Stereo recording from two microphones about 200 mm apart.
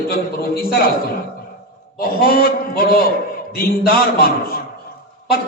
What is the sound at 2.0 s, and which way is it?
A man's voice, 50° left (ahead or behind).